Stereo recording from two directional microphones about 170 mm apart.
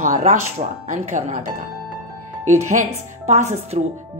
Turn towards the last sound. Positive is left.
turn(degrees=-40)  # may be behind; listen again after turning